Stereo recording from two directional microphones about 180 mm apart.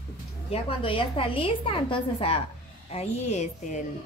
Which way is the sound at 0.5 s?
30° left (ahead or behind).